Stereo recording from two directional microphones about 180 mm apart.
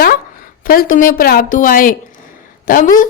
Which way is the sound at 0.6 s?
55° left (ahead or behind).